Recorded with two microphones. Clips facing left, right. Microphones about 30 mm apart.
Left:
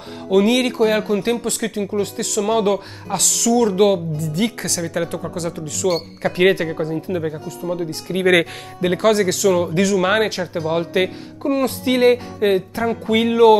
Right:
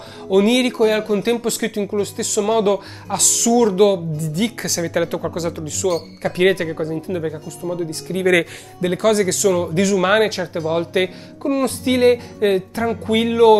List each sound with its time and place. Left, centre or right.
0.3 s speech: centre
4.8 s speech: centre
6.2 s speech: centre